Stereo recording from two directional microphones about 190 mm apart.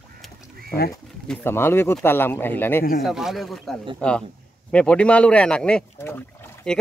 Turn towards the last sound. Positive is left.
turn(degrees=5)  # may be behind; listen again after turning